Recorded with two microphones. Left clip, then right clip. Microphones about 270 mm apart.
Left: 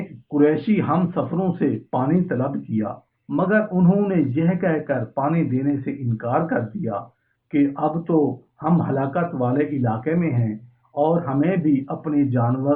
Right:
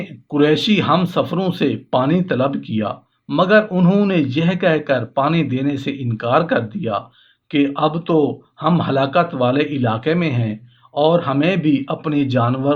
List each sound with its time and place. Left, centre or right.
0.3 s speech: right